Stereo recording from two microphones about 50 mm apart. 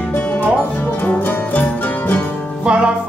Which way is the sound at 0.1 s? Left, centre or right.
Left.